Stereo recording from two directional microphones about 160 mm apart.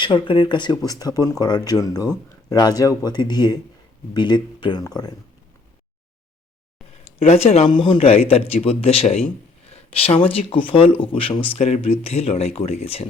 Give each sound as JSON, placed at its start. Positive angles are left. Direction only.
{"t": 0.0, "sound": "speech", "side_deg": 30}
{"t": 7.2, "sound": "speech", "side_deg": 45}
{"t": 7.7, "sound": "speech", "side_deg": 30}